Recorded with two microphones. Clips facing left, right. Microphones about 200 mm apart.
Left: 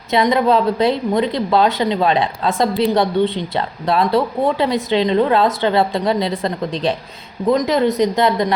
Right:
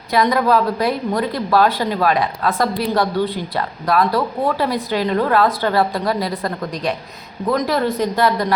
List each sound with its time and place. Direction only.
0.1 s a woman's voice: 25° left (ahead or behind)